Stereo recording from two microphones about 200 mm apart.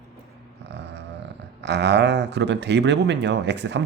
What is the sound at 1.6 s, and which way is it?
Speech, 60° right (ahead or behind).